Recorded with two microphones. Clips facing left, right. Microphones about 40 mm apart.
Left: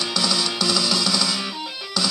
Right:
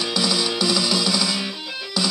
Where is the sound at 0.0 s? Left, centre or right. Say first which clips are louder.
Right 1 dB; centre.